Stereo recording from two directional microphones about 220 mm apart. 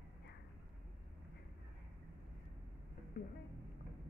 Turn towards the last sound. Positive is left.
turn(degrees=40)  # may be behind; listen again after turning